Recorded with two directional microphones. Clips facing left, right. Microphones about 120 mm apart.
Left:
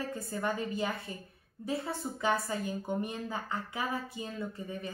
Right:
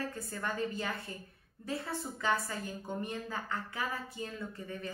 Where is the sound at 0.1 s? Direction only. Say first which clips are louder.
Left 4 dB; 15° left (ahead or behind).